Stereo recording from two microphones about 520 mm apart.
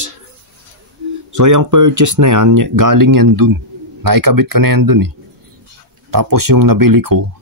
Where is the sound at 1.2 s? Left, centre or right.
Right.